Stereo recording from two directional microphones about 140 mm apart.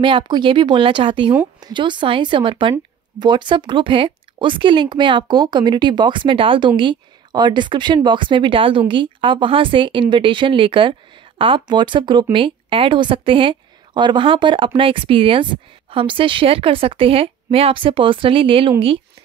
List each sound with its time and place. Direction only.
0.0 s speech: 35° right (ahead or behind)